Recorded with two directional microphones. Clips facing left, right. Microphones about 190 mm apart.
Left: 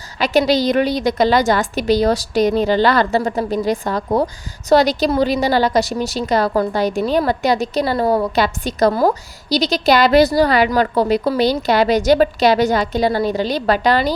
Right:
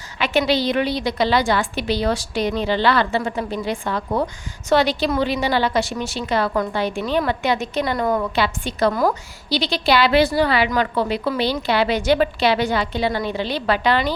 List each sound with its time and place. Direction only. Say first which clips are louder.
0.2 s a woman's voice: left 4 dB; 40° left (ahead or behind)